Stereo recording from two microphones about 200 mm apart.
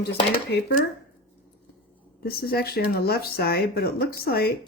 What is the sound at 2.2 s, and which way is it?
Speech, 50° left (ahead or behind).